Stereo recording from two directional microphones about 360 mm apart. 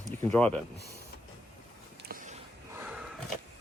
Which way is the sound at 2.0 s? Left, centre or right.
Right.